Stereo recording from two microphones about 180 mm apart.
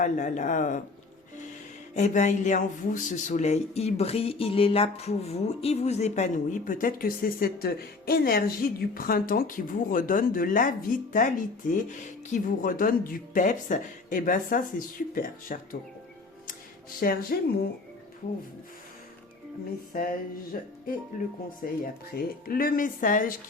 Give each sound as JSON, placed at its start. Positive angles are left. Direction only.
{"t": 0.0, "sound": "speech", "side_deg": 45}
{"t": 2.0, "sound": "speech", "side_deg": 40}
{"t": 17.0, "sound": "speech", "side_deg": 55}
{"t": 19.9, "sound": "speech", "side_deg": 50}